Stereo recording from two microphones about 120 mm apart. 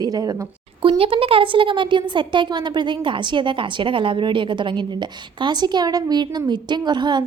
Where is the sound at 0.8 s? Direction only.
50° right (ahead or behind).